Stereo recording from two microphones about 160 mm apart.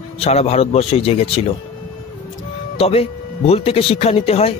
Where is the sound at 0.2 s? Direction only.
40° left (ahead or behind).